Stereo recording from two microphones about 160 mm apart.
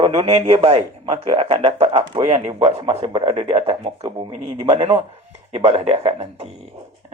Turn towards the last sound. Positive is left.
turn(degrees=-40)  # may be behind; listen again after turning